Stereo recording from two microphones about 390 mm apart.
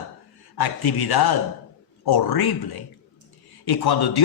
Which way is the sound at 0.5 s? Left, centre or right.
Left.